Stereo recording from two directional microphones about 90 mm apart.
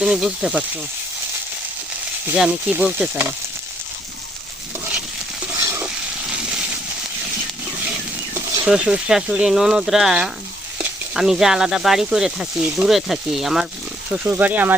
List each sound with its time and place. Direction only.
0.0 s speech: 10° right (ahead or behind)
2.4 s speech: 10° right (ahead or behind)
6.3 s a sound: 10° right (ahead or behind)
8.6 s speech: 10° right (ahead or behind)
14.1 s speech: 20° right (ahead or behind)